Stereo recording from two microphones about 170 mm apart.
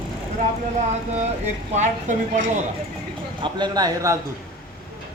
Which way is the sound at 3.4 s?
25° right (ahead or behind).